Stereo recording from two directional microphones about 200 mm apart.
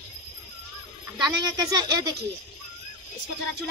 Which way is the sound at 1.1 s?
20° right (ahead or behind).